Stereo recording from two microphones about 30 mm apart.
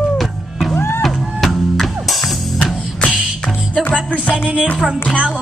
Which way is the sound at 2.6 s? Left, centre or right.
Left.